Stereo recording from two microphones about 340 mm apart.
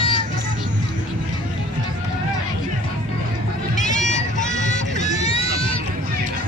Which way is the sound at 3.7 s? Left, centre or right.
Left.